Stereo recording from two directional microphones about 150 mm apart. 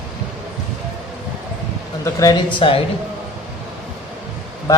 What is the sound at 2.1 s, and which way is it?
Speech, 25° left (ahead or behind).